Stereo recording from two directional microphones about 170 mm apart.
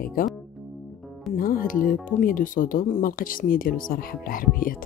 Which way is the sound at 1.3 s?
55° left (ahead or behind).